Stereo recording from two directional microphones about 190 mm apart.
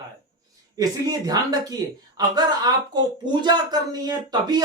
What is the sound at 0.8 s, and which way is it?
Speech, 20° right (ahead or behind).